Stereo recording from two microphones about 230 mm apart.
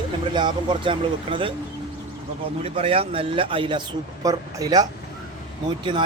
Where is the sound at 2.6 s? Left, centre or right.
Right.